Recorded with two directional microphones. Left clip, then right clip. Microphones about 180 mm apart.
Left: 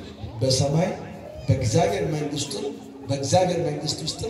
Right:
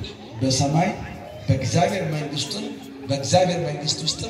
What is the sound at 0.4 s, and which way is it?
Speech, 65° left (ahead or behind).